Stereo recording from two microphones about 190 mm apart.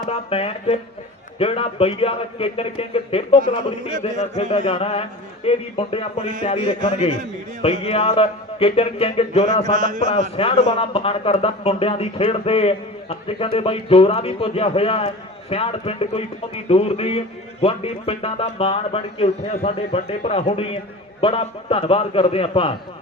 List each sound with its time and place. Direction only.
0.1 s a man's voice: 30° left (ahead or behind)